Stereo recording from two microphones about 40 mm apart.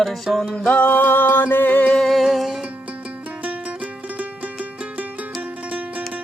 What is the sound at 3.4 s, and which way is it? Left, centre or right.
Music, right.